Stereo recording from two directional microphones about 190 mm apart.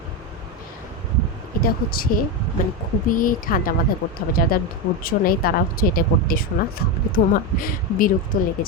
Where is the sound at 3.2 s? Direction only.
45° left (ahead or behind).